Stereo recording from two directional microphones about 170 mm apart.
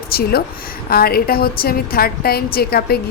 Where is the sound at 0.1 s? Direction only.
65° left (ahead or behind).